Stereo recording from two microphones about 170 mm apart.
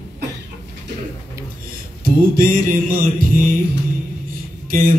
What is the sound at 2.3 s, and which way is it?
Music, 55° right (ahead or behind).